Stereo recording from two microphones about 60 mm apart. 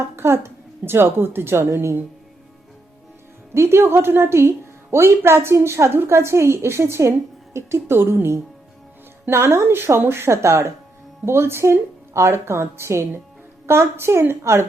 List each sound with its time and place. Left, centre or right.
0.2 s a woman's voice: right
3.5 s a woman's voice: right
11.3 s a woman's voice: right